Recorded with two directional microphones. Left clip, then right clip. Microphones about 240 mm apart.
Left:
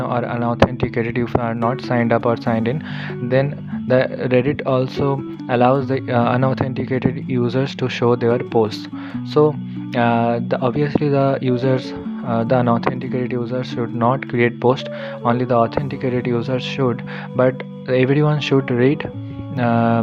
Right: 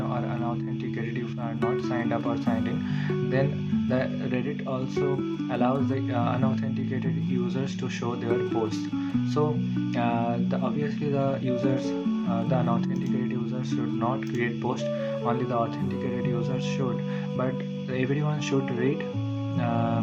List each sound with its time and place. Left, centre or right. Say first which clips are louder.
0.1 s speech: left 10 dB; left
3.8 s speech: left 14 dB; left